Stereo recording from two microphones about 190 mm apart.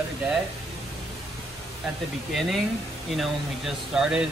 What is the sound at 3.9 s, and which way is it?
Speech, 5° right (ahead or behind).